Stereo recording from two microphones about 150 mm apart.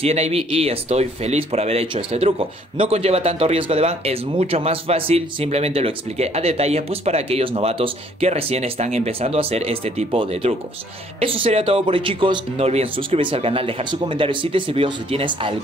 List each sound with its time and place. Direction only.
0.0 s speech: 45° right (ahead or behind)